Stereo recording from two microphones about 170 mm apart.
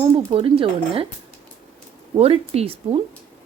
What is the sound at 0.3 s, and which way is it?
Speech, 30° right (ahead or behind).